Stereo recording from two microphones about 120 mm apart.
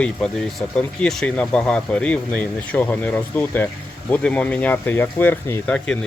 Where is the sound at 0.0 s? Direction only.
10° left (ahead or behind).